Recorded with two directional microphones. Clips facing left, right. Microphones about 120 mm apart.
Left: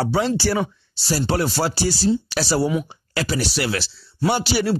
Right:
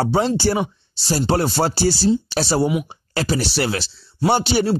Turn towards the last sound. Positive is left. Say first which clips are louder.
# right 3 dB
turn(degrees=-25)  # may be behind; listen again after turning